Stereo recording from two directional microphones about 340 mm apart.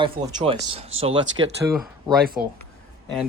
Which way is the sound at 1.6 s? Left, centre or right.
Centre.